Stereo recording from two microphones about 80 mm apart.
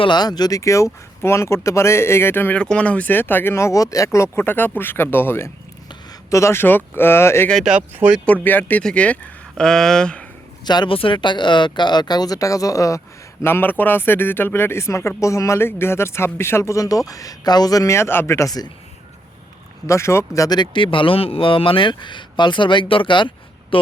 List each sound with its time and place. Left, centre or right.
0.0 s speech: left
2.6 s speech: centre; by 7.4 s left
7.6 s speech: centre
8.2 s speech: centre
8.8 s speech: centre
10.7 s speech: left
13.4 s speech: left
19.9 s speech: left
20.6 s speech: left